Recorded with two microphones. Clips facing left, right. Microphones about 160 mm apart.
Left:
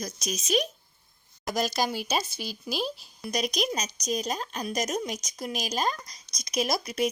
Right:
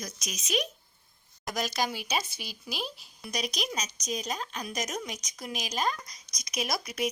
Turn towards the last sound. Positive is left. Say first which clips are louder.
# left 4 dB
turn(degrees=35)  # may be behind; listen again after turning